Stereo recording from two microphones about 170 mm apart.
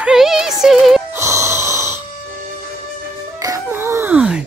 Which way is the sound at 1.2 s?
15° right (ahead or behind).